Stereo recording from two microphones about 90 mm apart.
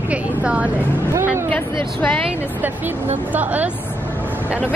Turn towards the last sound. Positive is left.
turn(degrees=-15)  # may be behind; listen again after turning